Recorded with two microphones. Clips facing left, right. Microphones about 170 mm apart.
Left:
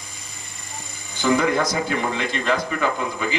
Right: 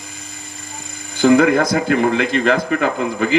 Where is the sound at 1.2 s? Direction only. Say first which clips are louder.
Right 7 dB; 55° right (ahead or behind).